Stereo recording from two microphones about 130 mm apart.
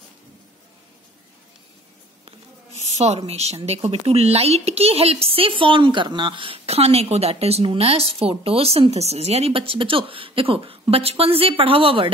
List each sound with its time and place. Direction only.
3.0 s speech: 55° right (ahead or behind)